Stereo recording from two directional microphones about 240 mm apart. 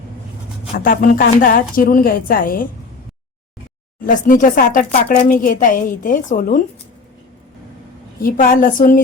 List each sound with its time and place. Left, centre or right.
0.8 s speech: left
4.0 s speech: left
8.2 s speech: left